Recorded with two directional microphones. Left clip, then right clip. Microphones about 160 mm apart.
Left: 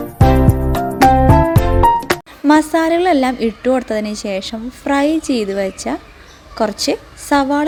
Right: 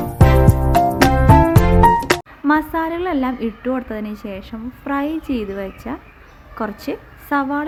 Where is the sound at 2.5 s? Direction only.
20° left (ahead or behind).